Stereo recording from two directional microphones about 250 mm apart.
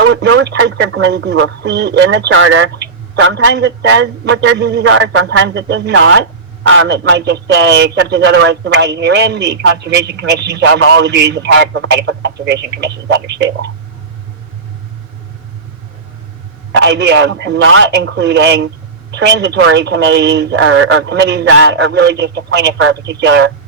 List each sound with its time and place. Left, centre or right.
0.1 s speech: right
16.7 s speech: right